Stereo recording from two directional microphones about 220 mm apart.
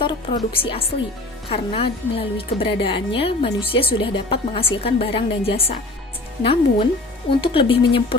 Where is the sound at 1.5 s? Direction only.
25° left (ahead or behind).